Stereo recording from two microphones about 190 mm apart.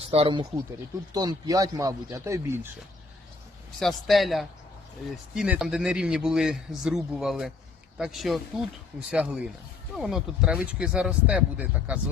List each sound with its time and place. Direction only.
0.0 s speech: 30° right (ahead or behind); by 2.6 s 15° right (ahead or behind)
3.8 s a man's voice: centre (ahead or behind)